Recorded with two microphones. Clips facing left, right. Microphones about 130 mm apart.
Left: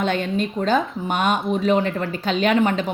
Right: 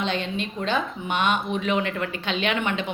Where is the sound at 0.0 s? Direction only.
50° left (ahead or behind).